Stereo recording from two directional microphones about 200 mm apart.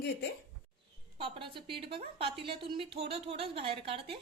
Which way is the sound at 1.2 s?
25° right (ahead or behind).